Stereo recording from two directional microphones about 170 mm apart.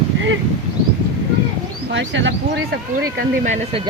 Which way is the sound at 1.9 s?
90° right.